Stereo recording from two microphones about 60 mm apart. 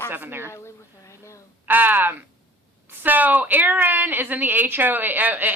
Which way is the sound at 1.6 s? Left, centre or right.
Right.